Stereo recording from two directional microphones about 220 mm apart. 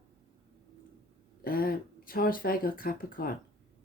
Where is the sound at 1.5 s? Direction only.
40° left (ahead or behind).